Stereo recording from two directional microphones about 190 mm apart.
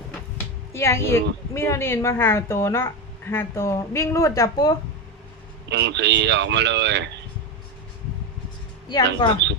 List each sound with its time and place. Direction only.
0.3 s a woman's voice: 15° left (ahead or behind)
5.6 s speech: 65° right (ahead or behind)
9.2 s speech: 20° left (ahead or behind)